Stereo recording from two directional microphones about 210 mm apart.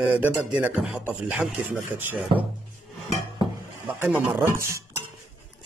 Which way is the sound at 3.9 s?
10° right (ahead or behind).